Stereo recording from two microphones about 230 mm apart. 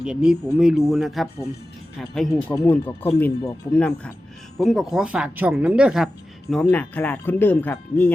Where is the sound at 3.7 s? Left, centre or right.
Centre.